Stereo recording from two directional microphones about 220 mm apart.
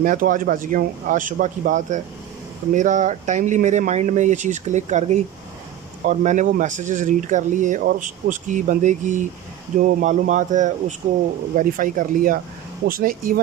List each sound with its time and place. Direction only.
0.0 s speech: 35° right (ahead or behind)